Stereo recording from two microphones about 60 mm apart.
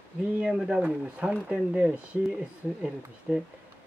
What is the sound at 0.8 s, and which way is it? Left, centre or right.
Speech, right.